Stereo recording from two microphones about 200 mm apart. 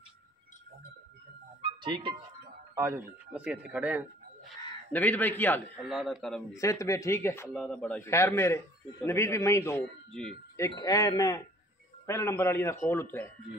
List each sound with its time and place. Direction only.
1.6 s music: 25° right (ahead or behind)
2.7 s speech: 15° right (ahead or behind)
4.9 s a man's voice: 10° left (ahead or behind)
6.5 s a man's voice: 15° left (ahead or behind)
10.6 s a man's voice: 20° left (ahead or behind)